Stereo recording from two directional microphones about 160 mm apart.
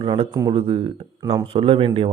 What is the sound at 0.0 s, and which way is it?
Speech, 35° right (ahead or behind).